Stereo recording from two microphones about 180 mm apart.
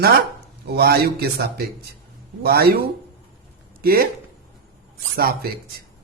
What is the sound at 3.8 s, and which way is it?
Speech, 55° right (ahead or behind).